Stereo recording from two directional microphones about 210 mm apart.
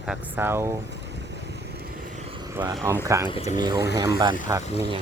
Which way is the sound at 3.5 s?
20° right (ahead or behind).